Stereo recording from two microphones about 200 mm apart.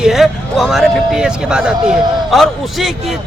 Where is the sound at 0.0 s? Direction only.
Centre (ahead or behind).